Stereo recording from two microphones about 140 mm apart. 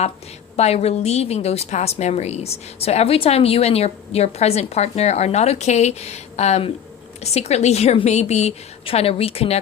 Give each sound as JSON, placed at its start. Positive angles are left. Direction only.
{"t": 0.5, "sound": "a woman's voice", "side_deg": 50}